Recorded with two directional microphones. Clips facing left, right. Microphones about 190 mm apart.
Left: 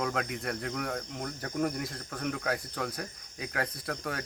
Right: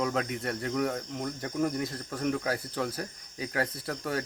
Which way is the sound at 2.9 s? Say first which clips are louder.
Right 3 dB; 30° right (ahead or behind).